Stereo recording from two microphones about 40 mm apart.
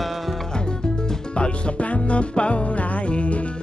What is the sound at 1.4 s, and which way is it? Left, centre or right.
Music, left.